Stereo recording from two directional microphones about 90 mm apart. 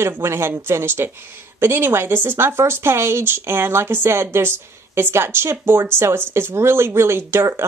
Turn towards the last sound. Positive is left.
turn(degrees=-30)  # may be behind; listen again after turning